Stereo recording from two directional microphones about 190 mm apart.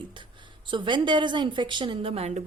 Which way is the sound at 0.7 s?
25° right (ahead or behind).